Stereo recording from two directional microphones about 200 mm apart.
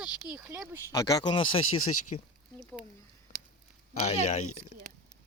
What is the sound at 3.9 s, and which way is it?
Speech, 35° left (ahead or behind).